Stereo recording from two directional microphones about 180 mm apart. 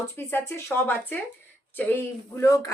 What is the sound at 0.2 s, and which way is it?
Speech, 15° left (ahead or behind).